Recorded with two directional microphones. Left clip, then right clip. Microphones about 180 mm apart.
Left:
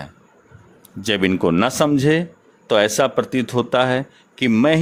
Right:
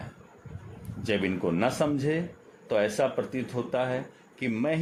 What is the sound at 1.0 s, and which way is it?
A man's voice, 55° left (ahead or behind).